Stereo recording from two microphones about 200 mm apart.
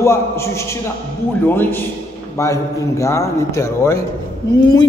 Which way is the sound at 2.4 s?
15° left (ahead or behind).